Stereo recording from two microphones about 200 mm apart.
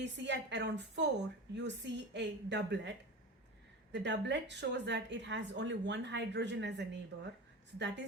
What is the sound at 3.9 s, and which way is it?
Speech, 60° right (ahead or behind).